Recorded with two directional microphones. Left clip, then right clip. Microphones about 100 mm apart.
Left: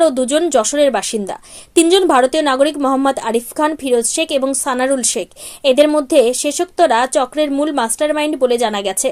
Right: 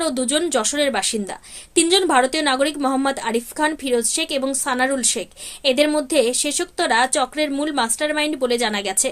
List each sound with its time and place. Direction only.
0.0 s a woman's voice: 40° left (ahead or behind)